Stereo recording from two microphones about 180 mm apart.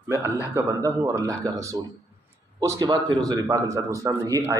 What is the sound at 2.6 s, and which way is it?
A man's voice, 20° right (ahead or behind).